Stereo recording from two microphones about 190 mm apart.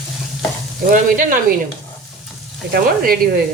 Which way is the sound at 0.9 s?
50° right (ahead or behind).